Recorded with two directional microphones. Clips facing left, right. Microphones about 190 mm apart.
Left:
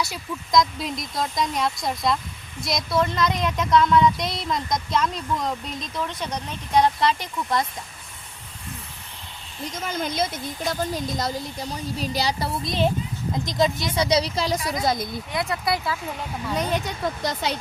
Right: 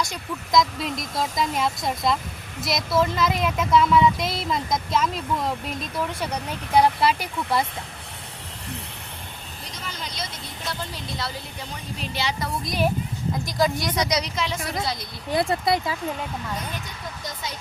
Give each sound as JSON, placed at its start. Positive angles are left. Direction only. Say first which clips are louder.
{"t": 0.0, "sound": "speech", "louder": "even", "side_deg": 0}
{"t": 9.7, "sound": "a woman's voice", "louder": "left 9 dB", "side_deg": 50}
{"t": 12.6, "sound": "speech", "louder": "left 1 dB", "side_deg": 25}
{"t": 14.8, "sound": "a woman's voice", "louder": "left 5 dB", "side_deg": 50}
{"t": 15.3, "sound": "speech", "louder": "right 5 dB", "side_deg": -30}
{"t": 16.8, "sound": "speech", "louder": "left 9 dB", "side_deg": 75}